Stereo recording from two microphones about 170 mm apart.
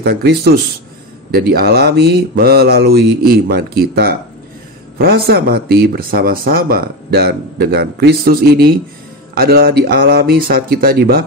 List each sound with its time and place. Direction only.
0.0 s speech: 70° right (ahead or behind)